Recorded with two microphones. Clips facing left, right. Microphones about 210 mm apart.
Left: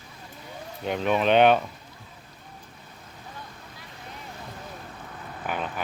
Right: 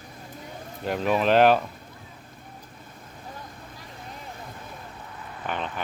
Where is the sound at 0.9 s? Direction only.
Centre (ahead or behind).